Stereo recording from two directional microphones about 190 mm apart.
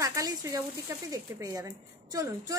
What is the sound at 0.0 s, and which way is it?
A woman's voice, 15° right (ahead or behind).